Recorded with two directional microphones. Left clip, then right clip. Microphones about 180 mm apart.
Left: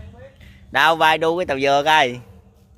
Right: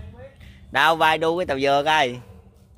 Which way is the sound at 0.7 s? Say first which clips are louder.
Left 3 dB; 15° left (ahead or behind).